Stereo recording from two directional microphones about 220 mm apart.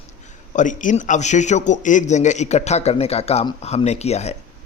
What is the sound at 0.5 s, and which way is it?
A man's voice, 35° left (ahead or behind).